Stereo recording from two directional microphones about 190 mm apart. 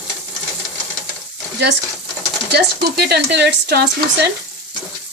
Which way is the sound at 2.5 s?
60° right (ahead or behind).